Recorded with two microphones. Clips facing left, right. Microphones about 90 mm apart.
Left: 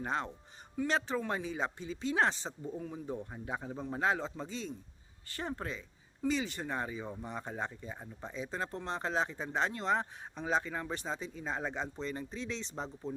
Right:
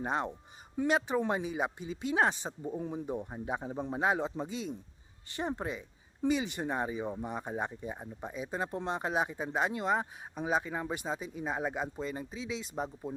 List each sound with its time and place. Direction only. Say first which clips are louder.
0.0 s speech: right 3 dB; 20° right (ahead or behind)